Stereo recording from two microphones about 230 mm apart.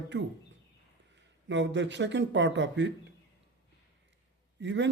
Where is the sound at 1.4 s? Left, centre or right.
Right.